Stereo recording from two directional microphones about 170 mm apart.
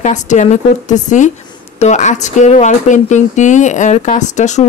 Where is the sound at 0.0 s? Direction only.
45° left (ahead or behind).